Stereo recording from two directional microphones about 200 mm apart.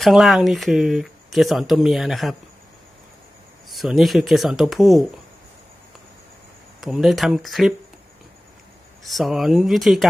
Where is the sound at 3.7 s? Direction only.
Centre (ahead or behind).